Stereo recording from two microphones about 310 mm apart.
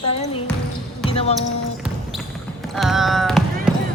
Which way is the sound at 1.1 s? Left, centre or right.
Centre.